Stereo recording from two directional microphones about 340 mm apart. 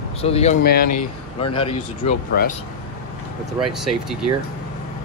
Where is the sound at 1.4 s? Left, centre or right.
Centre.